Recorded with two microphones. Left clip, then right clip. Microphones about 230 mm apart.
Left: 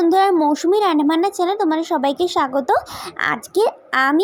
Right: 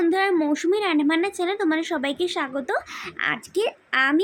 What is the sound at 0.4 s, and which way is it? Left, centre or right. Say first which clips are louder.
Speech: left 6 dB; centre.